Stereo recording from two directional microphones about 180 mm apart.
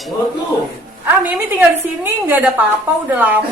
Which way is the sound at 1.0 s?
10° right (ahead or behind).